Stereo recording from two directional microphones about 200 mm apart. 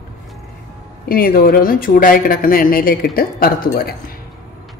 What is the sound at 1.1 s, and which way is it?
Speech, 50° left (ahead or behind).